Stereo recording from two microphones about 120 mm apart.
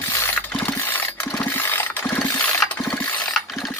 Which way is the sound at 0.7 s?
15° left (ahead or behind).